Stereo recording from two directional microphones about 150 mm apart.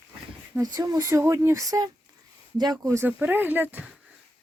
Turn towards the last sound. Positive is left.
turn(degrees=-10)  # may be behind; listen again after turning